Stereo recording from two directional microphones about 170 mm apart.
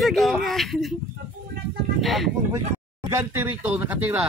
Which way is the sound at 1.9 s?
Centre (ahead or behind).